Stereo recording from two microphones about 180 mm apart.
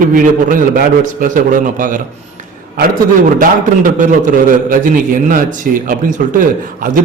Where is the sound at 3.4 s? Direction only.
45° right (ahead or behind).